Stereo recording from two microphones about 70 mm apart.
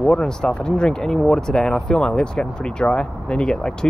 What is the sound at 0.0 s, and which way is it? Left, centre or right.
Speech, centre.